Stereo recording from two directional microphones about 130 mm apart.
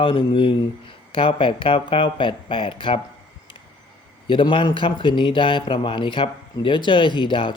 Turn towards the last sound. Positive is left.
turn(degrees=40)  # may be behind; listen again after turning